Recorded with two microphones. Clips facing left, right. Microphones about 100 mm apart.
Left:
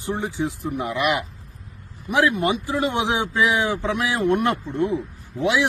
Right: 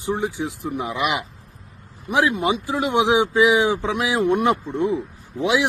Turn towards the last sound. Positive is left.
turn(degrees=-15)  # may be behind; listen again after turning